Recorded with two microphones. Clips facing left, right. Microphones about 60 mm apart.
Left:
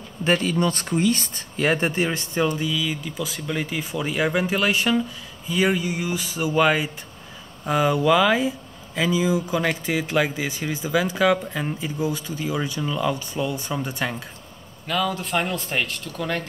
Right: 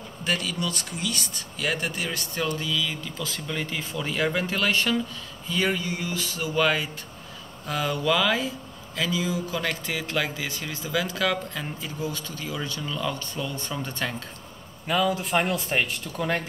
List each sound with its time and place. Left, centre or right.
0.2 s speech: left; by 14.1 s centre
14.9 s speech: centre